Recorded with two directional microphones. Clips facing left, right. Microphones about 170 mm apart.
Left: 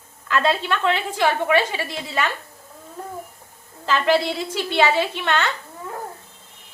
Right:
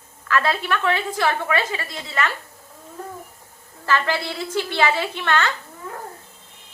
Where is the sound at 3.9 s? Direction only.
15° left (ahead or behind).